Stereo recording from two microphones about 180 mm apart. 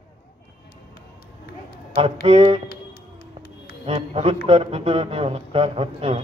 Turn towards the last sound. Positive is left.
turn(degrees=-30)  # may be behind; listen again after turning